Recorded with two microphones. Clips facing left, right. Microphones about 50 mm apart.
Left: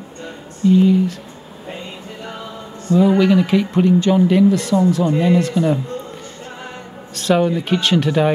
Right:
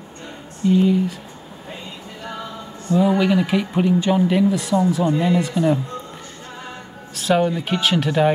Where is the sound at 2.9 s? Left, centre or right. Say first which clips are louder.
Left 4 dB; centre.